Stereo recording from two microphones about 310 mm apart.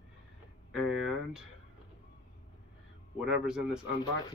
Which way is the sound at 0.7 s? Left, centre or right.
Centre.